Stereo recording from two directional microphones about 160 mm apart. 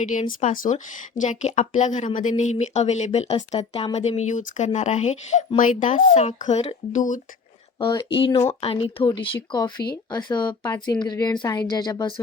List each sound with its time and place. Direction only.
0.1 s speech: 50° left (ahead or behind)
7.8 s speech: 30° left (ahead or behind)